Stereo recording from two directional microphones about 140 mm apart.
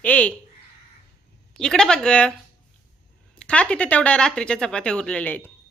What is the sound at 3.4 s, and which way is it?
Speech, 10° left (ahead or behind).